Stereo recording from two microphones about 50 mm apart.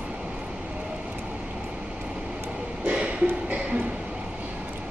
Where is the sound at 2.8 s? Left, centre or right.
Right.